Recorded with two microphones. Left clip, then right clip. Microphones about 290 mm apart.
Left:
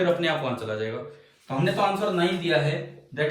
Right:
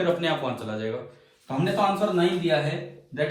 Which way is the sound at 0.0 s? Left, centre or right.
Centre.